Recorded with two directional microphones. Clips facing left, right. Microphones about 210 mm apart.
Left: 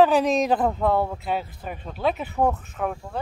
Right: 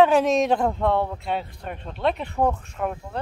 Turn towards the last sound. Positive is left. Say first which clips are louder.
# even
turn(degrees=0)  # may be behind; listen again after turning